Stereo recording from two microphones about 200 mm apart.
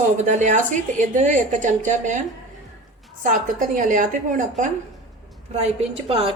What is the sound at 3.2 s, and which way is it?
A woman's voice, 40° right (ahead or behind).